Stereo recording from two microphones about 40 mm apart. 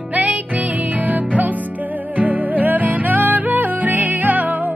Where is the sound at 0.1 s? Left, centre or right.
Right.